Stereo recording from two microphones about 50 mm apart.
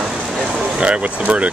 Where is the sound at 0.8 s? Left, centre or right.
Right.